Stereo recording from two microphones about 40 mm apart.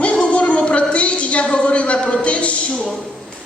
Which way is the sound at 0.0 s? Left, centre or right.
Left.